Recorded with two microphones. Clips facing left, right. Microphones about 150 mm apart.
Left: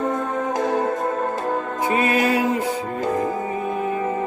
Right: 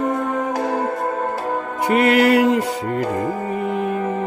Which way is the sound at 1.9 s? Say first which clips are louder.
Right 6 dB; 75° right (ahead or behind).